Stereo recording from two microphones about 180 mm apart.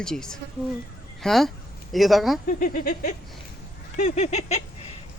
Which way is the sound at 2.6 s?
50° left (ahead or behind).